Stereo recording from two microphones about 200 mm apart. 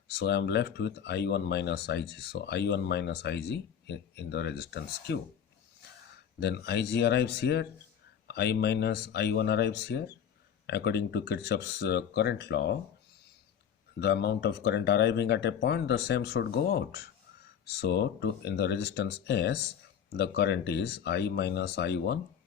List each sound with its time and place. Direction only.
0.2 s speech: 55° left (ahead or behind)
6.4 s speech: 55° left (ahead or behind)
14.0 s speech: 55° left (ahead or behind)